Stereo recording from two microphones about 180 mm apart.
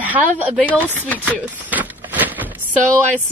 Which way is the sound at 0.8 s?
10° left (ahead or behind).